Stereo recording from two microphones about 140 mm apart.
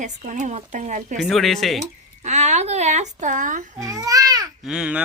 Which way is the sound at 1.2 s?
Centre (ahead or behind).